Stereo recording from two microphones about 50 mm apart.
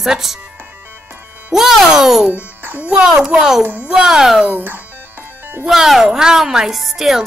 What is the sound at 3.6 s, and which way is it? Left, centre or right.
Speech, right.